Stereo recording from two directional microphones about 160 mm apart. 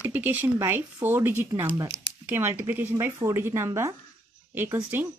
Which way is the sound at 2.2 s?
10° right (ahead or behind).